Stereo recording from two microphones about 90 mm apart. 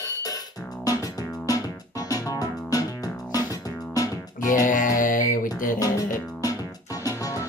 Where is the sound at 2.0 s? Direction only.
40° left (ahead or behind).